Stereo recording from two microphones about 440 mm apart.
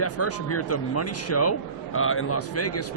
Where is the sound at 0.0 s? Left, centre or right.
Left.